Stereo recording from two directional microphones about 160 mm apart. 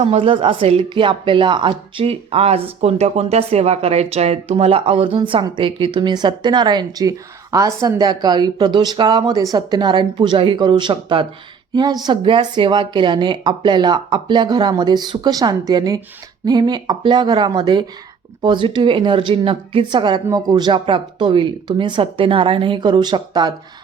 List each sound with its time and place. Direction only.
0.0 s a woman's voice: 40° right (ahead or behind)